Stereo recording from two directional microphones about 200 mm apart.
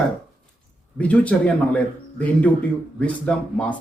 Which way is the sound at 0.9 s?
5° left (ahead or behind).